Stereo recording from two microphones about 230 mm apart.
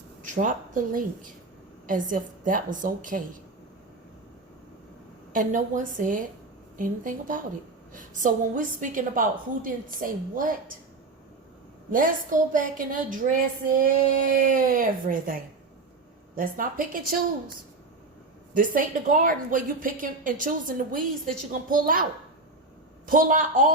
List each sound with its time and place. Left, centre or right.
0.2 s a woman's voice: right
5.3 s a woman's voice: right
11.9 s a woman's voice: right
18.5 s a woman's voice: right
23.0 s a woman's voice: right